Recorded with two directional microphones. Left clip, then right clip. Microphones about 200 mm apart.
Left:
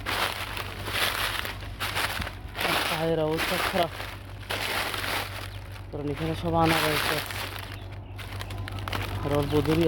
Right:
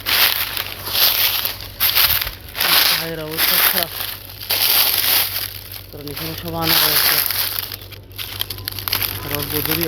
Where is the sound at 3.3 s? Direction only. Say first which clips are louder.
Right 8 dB; 30° right (ahead or behind).